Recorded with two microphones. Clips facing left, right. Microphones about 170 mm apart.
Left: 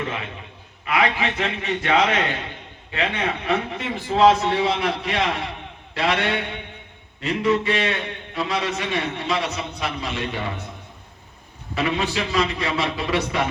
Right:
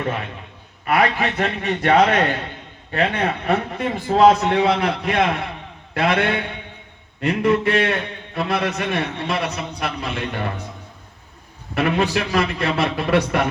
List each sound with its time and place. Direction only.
0.9 s a man's voice: 50° right (ahead or behind)
11.7 s a man's voice: 55° right (ahead or behind)